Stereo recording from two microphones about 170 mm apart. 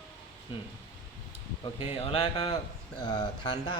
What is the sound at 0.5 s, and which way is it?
Speech, 30° left (ahead or behind).